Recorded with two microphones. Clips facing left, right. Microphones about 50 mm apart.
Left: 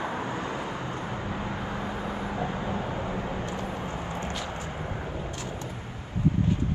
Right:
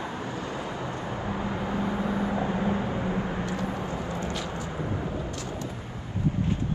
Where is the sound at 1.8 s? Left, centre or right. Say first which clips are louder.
Right 4 dB; right.